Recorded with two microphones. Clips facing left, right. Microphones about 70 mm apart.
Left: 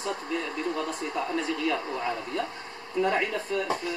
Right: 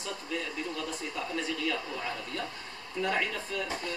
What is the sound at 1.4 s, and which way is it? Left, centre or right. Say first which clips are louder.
Speech: left 5 dB; left.